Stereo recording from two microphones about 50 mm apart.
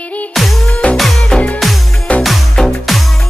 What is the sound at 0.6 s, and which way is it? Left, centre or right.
Music, left.